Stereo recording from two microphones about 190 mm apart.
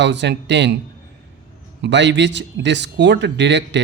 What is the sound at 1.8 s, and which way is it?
Speech, 70° right (ahead or behind).